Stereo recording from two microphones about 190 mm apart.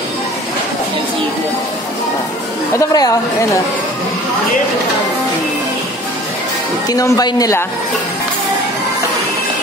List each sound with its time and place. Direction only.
2.8 s a woman's voice: 20° left (ahead or behind)
6.9 s a woman's voice: 20° left (ahead or behind)